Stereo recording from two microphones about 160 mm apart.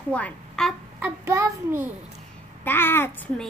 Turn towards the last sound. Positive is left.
turn(degrees=15)  # may be behind; listen again after turning